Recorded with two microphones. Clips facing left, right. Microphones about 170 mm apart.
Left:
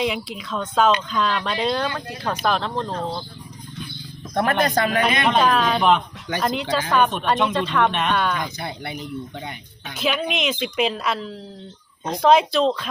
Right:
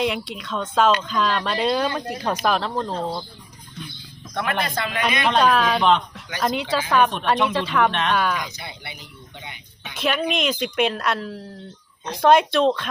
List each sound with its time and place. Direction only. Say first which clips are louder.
0.0 s speech: even; centre (ahead or behind)
4.4 s speech: left 5 dB; 45° left (ahead or behind)
5.2 s speech: right 3 dB; centre (ahead or behind)
8.5 s speech: left 7 dB; 50° left (ahead or behind)
9.9 s speech: right 1 dB; centre (ahead or behind)